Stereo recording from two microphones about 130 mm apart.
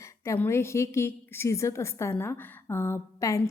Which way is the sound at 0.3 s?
20° left (ahead or behind).